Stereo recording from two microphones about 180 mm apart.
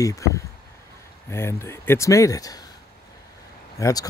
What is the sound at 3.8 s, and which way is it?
Speech, 20° left (ahead or behind).